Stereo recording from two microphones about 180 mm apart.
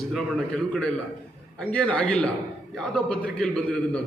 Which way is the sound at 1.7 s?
5° left (ahead or behind).